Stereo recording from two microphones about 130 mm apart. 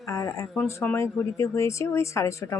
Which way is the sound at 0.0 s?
25° left (ahead or behind).